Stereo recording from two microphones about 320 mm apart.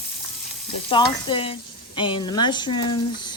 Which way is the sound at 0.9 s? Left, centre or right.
Centre.